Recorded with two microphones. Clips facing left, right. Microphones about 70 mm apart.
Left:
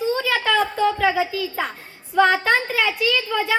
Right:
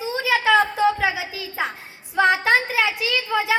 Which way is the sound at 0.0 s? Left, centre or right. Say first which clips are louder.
Even; centre.